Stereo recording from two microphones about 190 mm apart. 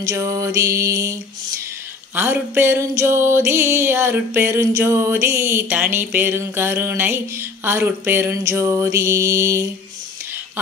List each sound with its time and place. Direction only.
0.0 s music: 15° right (ahead or behind)
2.1 s music: 10° right (ahead or behind)